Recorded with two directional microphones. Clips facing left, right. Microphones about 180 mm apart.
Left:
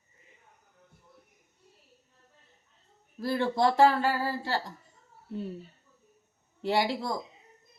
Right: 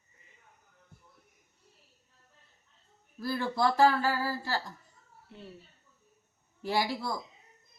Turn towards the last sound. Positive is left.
turn(degrees=20)  # may be behind; listen again after turning